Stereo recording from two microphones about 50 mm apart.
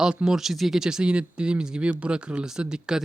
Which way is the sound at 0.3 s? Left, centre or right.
Centre.